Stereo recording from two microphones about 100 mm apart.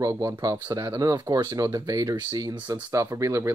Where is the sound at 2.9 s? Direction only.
30° right (ahead or behind).